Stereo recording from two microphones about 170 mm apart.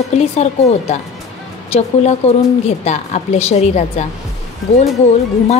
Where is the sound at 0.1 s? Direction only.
40° left (ahead or behind).